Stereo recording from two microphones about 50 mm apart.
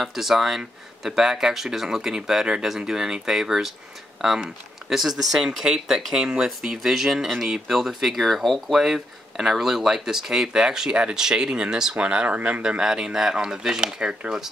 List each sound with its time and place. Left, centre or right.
0.0 s speech: centre; by 12.4 s right
12.4 s speech: right
12.6 s speech: centre